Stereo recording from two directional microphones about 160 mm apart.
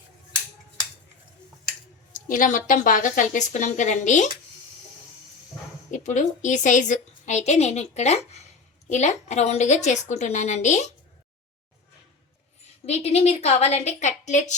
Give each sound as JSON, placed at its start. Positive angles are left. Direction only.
{"t": 2.1, "sound": "a woman's voice", "side_deg": 55}
{"t": 5.9, "sound": "a woman's voice", "side_deg": 50}
{"t": 12.8, "sound": "a woman's voice", "side_deg": 40}